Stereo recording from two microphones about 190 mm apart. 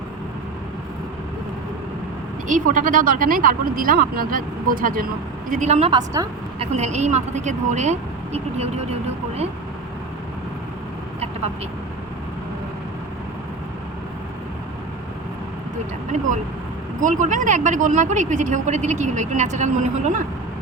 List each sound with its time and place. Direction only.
2.5 s speech: 45° right (ahead or behind)
5.9 s a woman's voice: 20° right (ahead or behind)
6.6 s speech: 35° right (ahead or behind)
17.0 s speech: 40° right (ahead or behind)